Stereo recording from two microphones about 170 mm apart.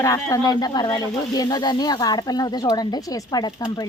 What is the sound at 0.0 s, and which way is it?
Speech, 20° left (ahead or behind).